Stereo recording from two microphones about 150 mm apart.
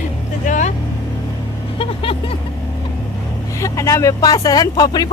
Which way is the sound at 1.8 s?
40° left (ahead or behind).